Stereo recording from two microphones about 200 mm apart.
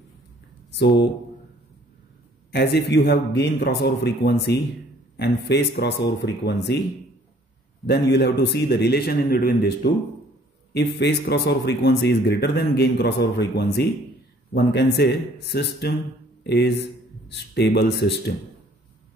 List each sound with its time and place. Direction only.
0.7 s speech: 60° left (ahead or behind)
2.5 s speech: 55° left (ahead or behind)
7.8 s speech: 55° left (ahead or behind)